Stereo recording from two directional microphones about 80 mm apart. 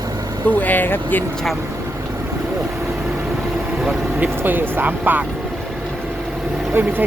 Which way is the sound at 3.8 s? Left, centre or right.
Centre.